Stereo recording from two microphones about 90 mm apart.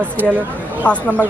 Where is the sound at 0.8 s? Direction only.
15° left (ahead or behind).